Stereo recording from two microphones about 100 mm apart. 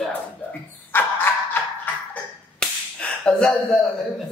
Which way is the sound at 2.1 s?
10° left (ahead or behind).